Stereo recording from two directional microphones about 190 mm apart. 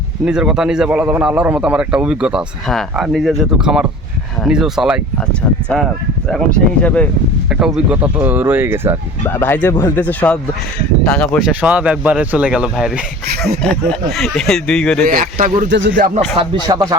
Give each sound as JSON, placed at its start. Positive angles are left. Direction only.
{"t": 0.3, "sound": "speech", "side_deg": -5}
{"t": 7.5, "sound": "speech", "side_deg": -5}
{"t": 9.2, "sound": "speech", "side_deg": 10}
{"t": 15.1, "sound": "speech", "side_deg": -45}
{"t": 15.7, "sound": "speech", "side_deg": -70}
{"t": 16.0, "sound": "speech", "side_deg": -45}
{"t": 16.4, "sound": "speech", "side_deg": -20}